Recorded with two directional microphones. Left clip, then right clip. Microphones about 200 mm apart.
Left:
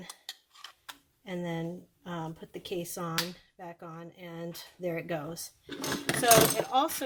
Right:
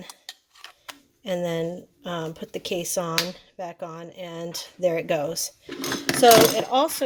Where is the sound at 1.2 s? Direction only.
45° right (ahead or behind).